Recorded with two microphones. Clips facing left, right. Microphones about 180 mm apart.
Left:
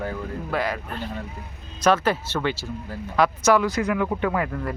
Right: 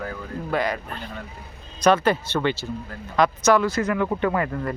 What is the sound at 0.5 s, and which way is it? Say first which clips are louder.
Speech: right 2 dB; 5° left (ahead or behind).